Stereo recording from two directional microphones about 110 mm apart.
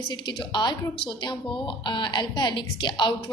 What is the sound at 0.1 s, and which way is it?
Speech, 45° left (ahead or behind).